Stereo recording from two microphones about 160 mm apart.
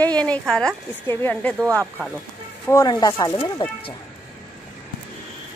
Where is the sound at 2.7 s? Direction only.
25° left (ahead or behind).